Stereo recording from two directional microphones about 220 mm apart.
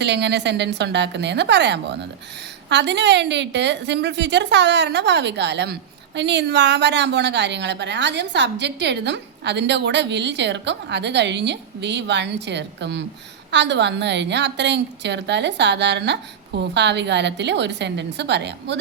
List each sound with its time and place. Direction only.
0.0 s a woman's voice: 50° right (ahead or behind)